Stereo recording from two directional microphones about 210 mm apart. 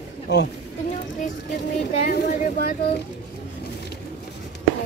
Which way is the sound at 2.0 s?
40° left (ahead or behind).